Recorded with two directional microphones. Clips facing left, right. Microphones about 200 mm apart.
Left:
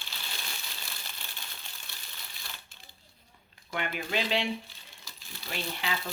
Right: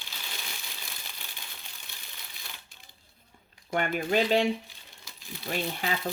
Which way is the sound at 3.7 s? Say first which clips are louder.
Right 6 dB; 45° right (ahead or behind).